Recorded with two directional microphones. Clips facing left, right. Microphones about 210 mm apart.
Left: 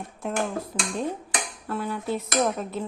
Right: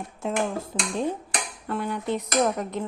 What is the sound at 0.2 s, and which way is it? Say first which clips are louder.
Speech: right 1 dB; 25° right (ahead or behind).